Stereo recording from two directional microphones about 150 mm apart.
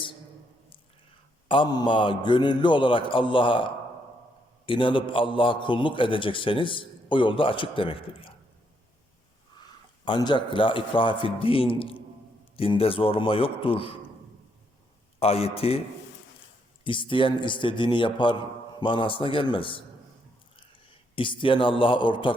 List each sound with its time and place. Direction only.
1.5 s a man's voice: 30° left (ahead or behind)
10.1 s a man's voice: 30° left (ahead or behind)
15.2 s speech: 45° left (ahead or behind)
16.8 s a man's voice: 35° left (ahead or behind)